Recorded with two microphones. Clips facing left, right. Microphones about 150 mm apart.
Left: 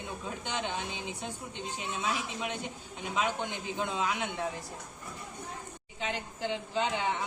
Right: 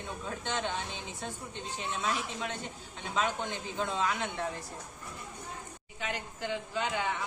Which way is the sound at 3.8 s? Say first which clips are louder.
Right 1 dB; 15° left (ahead or behind).